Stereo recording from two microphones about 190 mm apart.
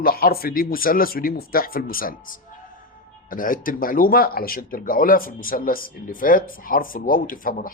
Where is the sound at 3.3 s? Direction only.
45° left (ahead or behind).